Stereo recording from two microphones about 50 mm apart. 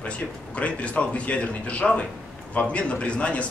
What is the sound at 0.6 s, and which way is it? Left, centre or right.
A man's voice, left.